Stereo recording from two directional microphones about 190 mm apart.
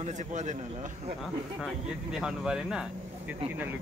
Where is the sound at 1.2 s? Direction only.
Centre (ahead or behind).